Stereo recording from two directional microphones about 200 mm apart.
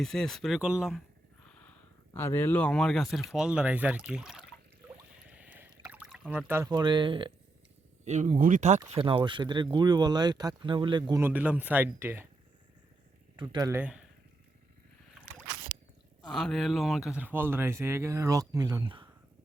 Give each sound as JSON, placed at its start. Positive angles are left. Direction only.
{"t": 0.0, "sound": "speech", "side_deg": 0}
{"t": 2.1, "sound": "speech", "side_deg": 10}
{"t": 5.3, "sound": "drip", "side_deg": -5}
{"t": 5.8, "sound": "speech", "side_deg": -5}
{"t": 8.0, "sound": "speech", "side_deg": -35}
{"t": 9.0, "sound": "speech", "side_deg": -25}
{"t": 11.2, "sound": "speech", "side_deg": -10}
{"t": 13.3, "sound": "speech", "side_deg": -20}
{"t": 16.2, "sound": "speech", "side_deg": 0}